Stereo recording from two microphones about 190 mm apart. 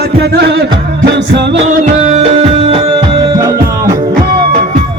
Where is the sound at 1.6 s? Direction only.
40° right (ahead or behind); by 3.9 s 20° right (ahead or behind).